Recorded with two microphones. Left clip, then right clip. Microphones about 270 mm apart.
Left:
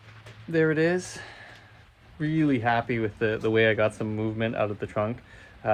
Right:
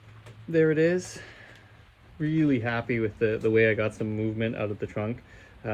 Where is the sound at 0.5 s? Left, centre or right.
Centre.